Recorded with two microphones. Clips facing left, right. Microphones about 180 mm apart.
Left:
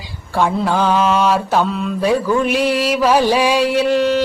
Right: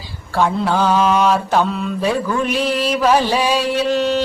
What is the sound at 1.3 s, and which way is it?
Mantra, 5° left (ahead or behind).